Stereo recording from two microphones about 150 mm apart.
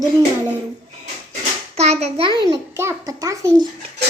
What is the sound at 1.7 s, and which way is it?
Hands, 45° right (ahead or behind).